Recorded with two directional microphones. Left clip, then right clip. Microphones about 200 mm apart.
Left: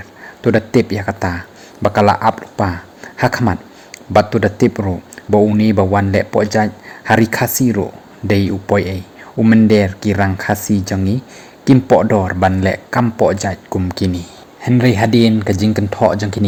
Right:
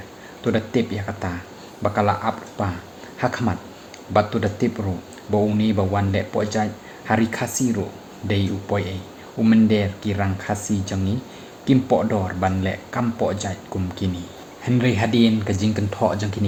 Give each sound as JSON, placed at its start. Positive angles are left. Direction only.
{"t": 0.4, "sound": "speech", "side_deg": 45}
{"t": 9.4, "sound": "speech", "side_deg": 30}
{"t": 9.6, "sound": "speech", "side_deg": 50}